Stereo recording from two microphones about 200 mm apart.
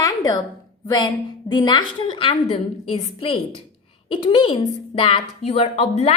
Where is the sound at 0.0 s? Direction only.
20° left (ahead or behind).